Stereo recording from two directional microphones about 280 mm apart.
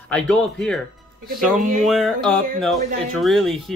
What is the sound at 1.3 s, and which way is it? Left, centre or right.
Speech, right.